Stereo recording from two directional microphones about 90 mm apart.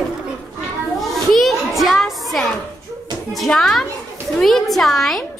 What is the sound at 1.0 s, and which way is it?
Children playing, centre (ahead or behind).